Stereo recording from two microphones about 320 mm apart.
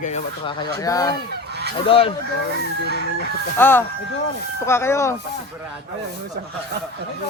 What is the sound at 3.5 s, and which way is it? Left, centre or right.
Speech, centre.